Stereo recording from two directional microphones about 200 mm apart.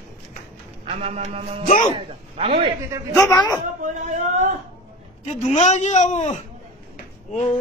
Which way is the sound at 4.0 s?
35° right (ahead or behind).